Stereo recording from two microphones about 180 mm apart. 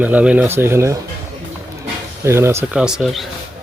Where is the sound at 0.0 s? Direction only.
10° right (ahead or behind).